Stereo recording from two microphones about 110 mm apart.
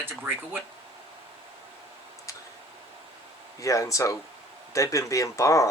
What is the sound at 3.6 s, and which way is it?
Speech, 30° left (ahead or behind).